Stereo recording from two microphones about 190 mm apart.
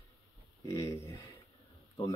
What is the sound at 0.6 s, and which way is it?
Speech, 15° left (ahead or behind).